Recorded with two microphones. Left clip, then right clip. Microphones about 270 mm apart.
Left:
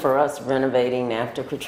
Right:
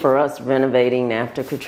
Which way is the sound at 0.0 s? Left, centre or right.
Right.